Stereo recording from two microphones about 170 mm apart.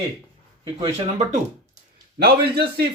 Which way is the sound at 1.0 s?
40° right (ahead or behind).